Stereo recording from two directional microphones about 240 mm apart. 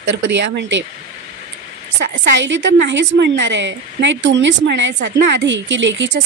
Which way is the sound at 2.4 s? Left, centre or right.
Right.